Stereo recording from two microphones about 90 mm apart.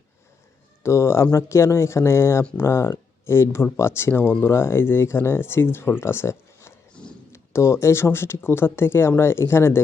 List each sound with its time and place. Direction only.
0.8 s speech: 30° left (ahead or behind)